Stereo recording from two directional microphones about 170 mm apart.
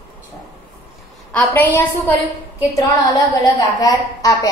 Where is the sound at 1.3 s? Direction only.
10° left (ahead or behind).